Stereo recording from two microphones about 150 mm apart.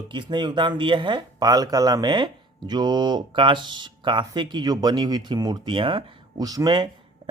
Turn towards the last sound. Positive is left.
turn(degrees=-25)  # may be behind; listen again after turning